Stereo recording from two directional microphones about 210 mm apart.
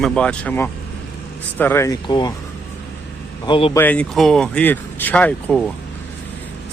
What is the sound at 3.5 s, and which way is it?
Speech, 25° left (ahead or behind).